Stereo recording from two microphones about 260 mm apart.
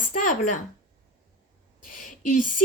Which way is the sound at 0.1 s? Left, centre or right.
Left.